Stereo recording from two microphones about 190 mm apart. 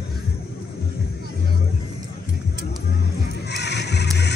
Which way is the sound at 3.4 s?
60° left (ahead or behind).